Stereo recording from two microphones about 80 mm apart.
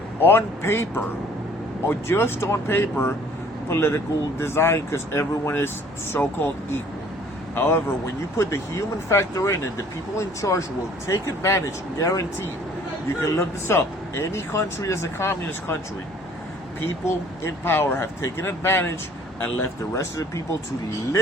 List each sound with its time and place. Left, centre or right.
0.2 s speech: left
13.2 s speech: left
17.4 s speech: left
20.0 s speech: left